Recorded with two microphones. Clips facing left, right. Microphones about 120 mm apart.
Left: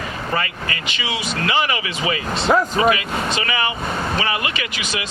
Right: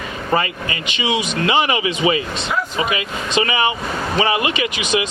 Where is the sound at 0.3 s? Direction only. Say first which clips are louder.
Right 6 dB; 20° right (ahead or behind).